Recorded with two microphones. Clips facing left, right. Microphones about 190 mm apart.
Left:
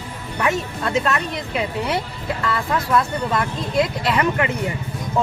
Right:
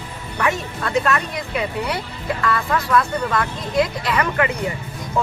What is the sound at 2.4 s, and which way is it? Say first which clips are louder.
Speech: right 1 dB; 25° left (ahead or behind).